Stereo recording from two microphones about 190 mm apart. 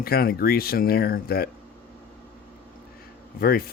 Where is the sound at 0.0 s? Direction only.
55° left (ahead or behind).